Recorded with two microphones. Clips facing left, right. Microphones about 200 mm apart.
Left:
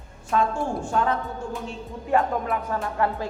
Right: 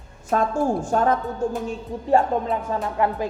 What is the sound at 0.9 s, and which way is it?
Speech, 45° right (ahead or behind).